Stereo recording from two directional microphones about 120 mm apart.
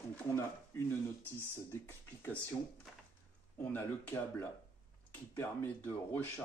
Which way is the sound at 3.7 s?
15° left (ahead or behind).